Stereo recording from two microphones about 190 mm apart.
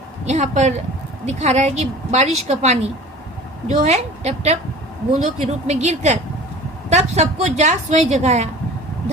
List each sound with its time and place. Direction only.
0.3 s a woman's voice: 35° right (ahead or behind)